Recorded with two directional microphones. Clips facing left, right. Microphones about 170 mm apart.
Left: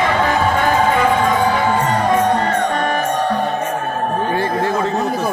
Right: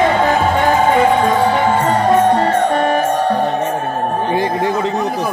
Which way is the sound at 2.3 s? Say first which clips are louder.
Right 4 dB; 30° right (ahead or behind).